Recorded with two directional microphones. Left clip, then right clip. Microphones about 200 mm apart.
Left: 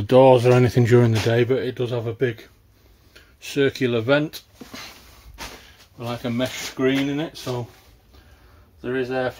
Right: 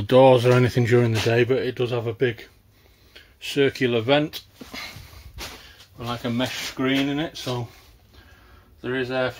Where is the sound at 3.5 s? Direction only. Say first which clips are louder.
Even; centre (ahead or behind).